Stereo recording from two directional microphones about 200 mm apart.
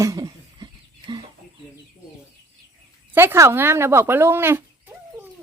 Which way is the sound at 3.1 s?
10° right (ahead or behind).